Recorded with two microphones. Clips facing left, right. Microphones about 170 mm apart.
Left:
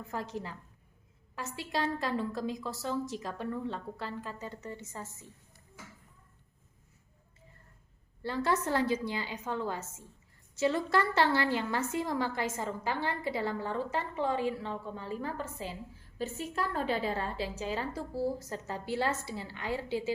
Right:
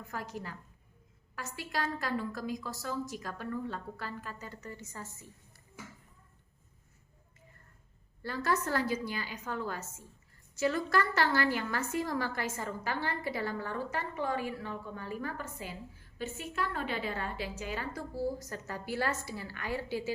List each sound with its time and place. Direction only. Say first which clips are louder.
0.1 s a woman's voice: left 3 dB; 25° left (ahead or behind)
8.2 s a woman's voice: left 2 dB; 25° left (ahead or behind)